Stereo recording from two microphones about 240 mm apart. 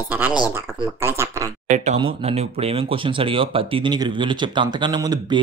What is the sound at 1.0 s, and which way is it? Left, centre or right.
Speech, centre.